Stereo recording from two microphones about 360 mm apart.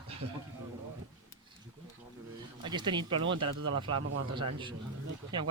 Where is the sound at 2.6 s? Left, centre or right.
Centre.